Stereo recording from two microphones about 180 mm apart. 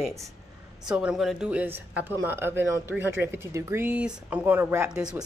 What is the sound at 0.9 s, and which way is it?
Speech, 5° right (ahead or behind).